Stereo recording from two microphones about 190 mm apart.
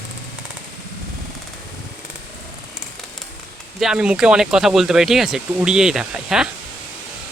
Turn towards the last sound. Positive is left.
turn(degrees=-5)  # may be behind; listen again after turning